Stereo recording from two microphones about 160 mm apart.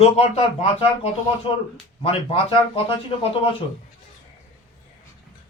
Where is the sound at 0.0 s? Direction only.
40° left (ahead or behind).